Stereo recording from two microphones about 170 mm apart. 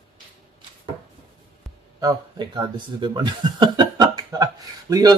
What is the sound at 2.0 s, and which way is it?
Speech, 25° right (ahead or behind).